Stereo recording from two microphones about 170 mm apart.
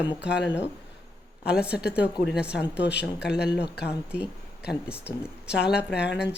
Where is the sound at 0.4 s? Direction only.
10° right (ahead or behind).